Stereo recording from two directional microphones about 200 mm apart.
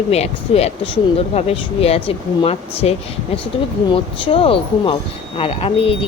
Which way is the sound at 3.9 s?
25° left (ahead or behind).